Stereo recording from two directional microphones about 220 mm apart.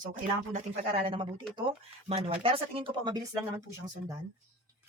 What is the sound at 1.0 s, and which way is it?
Speech, 25° right (ahead or behind).